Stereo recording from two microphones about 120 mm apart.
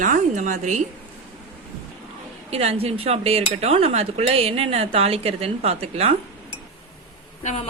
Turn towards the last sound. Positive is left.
turn(degrees=75)  # may be behind; listen again after turning